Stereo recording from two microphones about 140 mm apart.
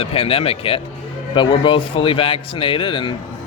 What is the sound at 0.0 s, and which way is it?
Speech, 45° left (ahead or behind).